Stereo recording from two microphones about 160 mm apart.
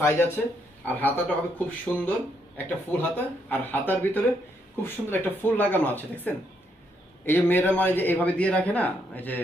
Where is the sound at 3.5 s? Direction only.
10° left (ahead or behind).